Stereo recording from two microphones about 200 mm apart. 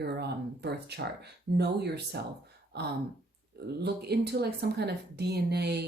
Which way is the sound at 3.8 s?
55° right (ahead or behind).